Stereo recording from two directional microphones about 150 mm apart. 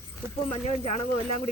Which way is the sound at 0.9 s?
50° left (ahead or behind).